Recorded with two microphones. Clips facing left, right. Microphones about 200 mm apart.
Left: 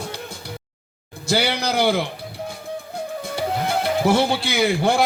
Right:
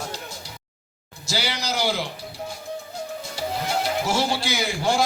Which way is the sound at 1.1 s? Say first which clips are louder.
Left 7 dB; 55° left (ahead or behind).